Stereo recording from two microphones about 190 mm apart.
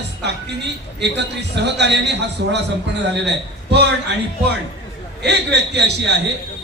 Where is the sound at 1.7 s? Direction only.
65° right (ahead or behind).